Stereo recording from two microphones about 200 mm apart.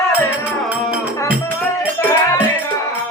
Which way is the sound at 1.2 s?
10° left (ahead or behind).